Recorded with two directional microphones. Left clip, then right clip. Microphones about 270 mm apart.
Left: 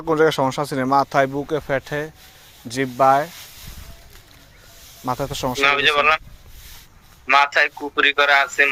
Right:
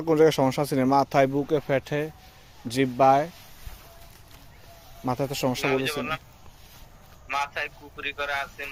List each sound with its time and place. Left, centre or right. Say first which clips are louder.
0.1 s speech: left 3 dB; centre
5.0 s speech: left 3 dB; centre
5.6 s a man's voice: left 16 dB; left
7.3 s a man's voice: left 13 dB; left